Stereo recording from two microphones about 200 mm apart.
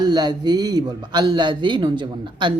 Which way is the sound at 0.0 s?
20° right (ahead or behind).